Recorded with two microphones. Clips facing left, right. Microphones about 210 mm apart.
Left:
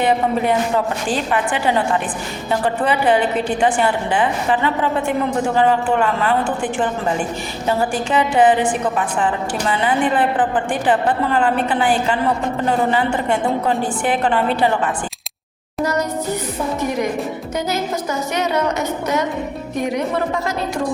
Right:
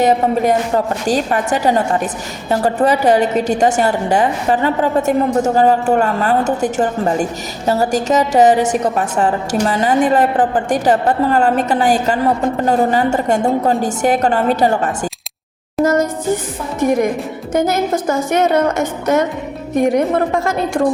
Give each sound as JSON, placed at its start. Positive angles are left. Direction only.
{"t": 0.0, "sound": "a sound", "side_deg": -40}
{"t": 1.0, "sound": "a woman's voice", "side_deg": -40}
{"t": 15.8, "sound": "music", "side_deg": -50}
{"t": 17.5, "sound": "a woman's voice", "side_deg": -50}